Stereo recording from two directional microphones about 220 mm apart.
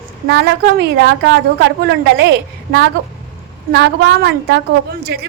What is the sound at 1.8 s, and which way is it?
Speech, 50° right (ahead or behind).